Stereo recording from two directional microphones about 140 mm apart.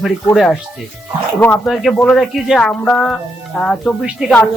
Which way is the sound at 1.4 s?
10° left (ahead or behind).